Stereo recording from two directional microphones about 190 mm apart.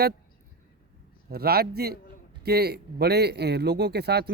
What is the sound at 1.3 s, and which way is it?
Speech, 55° right (ahead or behind).